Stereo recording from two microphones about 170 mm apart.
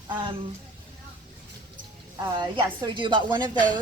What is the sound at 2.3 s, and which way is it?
A woman's voice, 25° right (ahead or behind).